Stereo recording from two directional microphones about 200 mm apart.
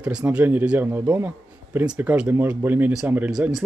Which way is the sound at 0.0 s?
5° right (ahead or behind).